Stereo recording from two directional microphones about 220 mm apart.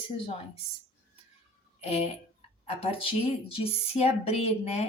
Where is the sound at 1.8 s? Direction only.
30° left (ahead or behind).